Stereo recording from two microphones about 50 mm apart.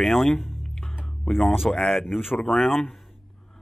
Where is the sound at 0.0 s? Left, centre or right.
Centre.